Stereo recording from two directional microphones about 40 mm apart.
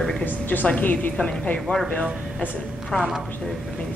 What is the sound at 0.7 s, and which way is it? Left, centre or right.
Speech, left.